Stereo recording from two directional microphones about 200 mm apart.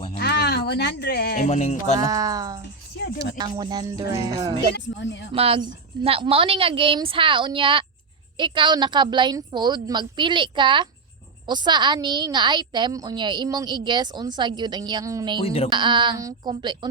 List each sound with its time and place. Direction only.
0.2 s music: 55° left (ahead or behind)
1.5 s music: 35° left (ahead or behind)
2.0 s a woman's voice: 20° right (ahead or behind)
3.0 s speech: 55° left (ahead or behind)
3.3 s a woman's voice: 20° right (ahead or behind)
4.7 s speech: 65° left (ahead or behind)
5.3 s a woman's voice: 25° right (ahead or behind)
15.4 s speech: 30° left (ahead or behind)
15.7 s a woman's voice: 25° right (ahead or behind)